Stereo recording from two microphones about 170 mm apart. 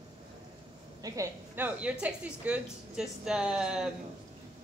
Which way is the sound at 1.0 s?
20° right (ahead or behind).